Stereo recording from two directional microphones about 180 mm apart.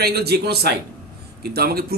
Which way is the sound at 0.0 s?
60° right (ahead or behind).